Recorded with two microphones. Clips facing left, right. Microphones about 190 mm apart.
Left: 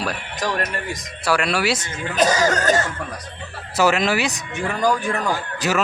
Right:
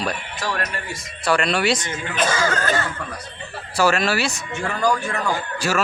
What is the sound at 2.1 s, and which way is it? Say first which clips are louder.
Speech: left 4 dB; 40° left (ahead or behind).